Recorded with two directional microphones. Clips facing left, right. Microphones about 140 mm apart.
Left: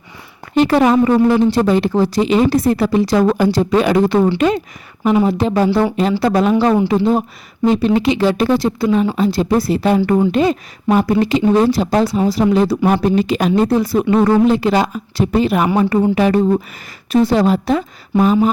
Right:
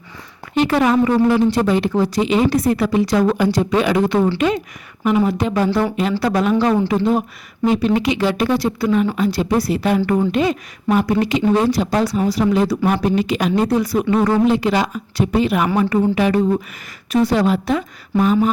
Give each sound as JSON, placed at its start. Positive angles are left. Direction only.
{"t": 0.5, "sound": "speech", "side_deg": 35}
{"t": 5.1, "sound": "a woman's voice", "side_deg": 30}